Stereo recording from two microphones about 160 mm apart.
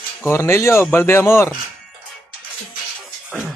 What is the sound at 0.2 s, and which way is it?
Speech, 15° left (ahead or behind).